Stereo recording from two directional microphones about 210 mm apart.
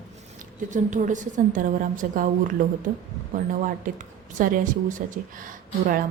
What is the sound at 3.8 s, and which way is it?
A woman's voice, 40° right (ahead or behind).